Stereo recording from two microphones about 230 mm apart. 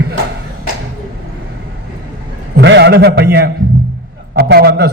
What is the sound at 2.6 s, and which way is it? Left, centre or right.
A man's voice, right.